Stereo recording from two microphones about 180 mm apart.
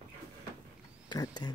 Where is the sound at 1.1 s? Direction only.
20° left (ahead or behind).